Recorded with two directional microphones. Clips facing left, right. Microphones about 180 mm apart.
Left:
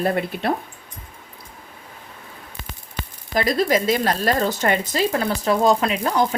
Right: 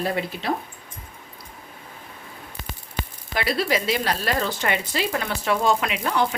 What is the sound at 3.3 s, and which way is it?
Speech, 40° left (ahead or behind).